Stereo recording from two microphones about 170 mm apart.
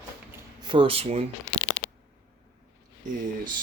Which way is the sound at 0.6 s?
30° right (ahead or behind).